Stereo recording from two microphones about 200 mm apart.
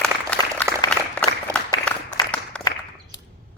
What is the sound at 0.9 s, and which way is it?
Applause, 5° left (ahead or behind).